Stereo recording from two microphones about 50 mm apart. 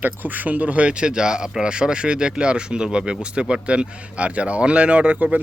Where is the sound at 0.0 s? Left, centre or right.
Right.